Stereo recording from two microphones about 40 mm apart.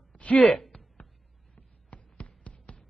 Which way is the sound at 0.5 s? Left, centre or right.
Centre.